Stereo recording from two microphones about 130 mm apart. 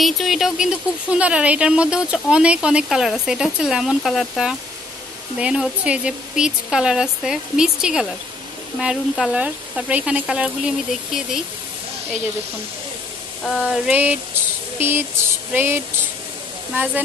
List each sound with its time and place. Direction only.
0.0 s speech: centre (ahead or behind)
13.4 s a sound: centre (ahead or behind); by 15.0 s 15° right (ahead or behind)
15.5 s speech: 15° right (ahead or behind)